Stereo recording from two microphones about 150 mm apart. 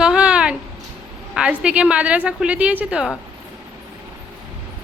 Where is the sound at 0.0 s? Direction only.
5° right (ahead or behind).